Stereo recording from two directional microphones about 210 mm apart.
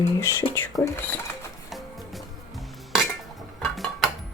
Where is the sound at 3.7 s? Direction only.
Centre (ahead or behind).